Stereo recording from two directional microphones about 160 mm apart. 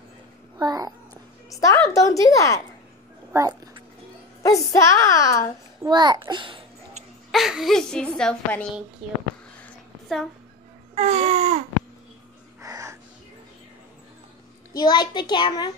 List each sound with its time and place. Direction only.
0.6 s a child's voice: 25° right (ahead or behind)
1.5 s a woman's voice: 20° left (ahead or behind)
3.3 s a sound: 20° right (ahead or behind)
4.4 s a woman's voice: 20° left (ahead or behind)
5.9 s a child's voice: 25° right (ahead or behind)
7.2 s a woman's voice: centre (ahead or behind)
11.0 s a sound: 45° right (ahead or behind)
12.6 s music: 20° right (ahead or behind)
14.8 s a woman's voice: 25° left (ahead or behind)